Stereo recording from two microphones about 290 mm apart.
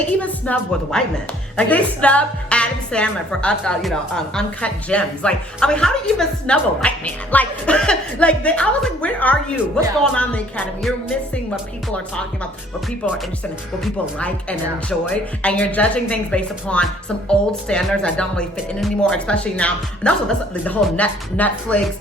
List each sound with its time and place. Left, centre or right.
0.0 s a woman's voice: centre
13.8 s a woman's voice: centre